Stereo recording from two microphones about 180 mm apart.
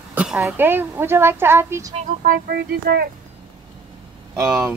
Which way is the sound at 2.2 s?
55° right (ahead or behind).